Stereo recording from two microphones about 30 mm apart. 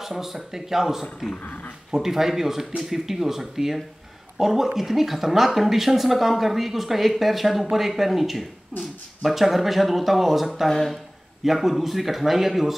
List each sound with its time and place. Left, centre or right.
0.0 s speech: centre
1.4 s speech: left
1.9 s speech: centre